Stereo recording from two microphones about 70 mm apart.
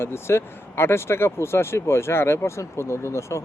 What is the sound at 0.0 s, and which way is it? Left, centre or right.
Speech, left.